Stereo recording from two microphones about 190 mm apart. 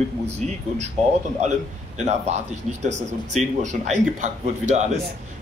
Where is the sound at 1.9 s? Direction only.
35° right (ahead or behind).